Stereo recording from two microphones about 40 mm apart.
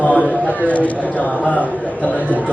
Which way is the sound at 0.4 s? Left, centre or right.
Left.